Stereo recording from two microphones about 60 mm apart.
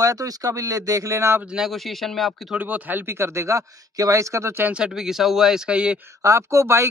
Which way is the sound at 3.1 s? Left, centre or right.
Right.